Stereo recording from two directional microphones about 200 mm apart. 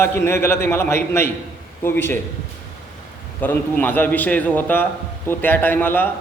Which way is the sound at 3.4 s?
10° left (ahead or behind).